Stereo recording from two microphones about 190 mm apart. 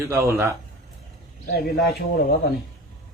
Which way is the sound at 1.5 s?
55° left (ahead or behind).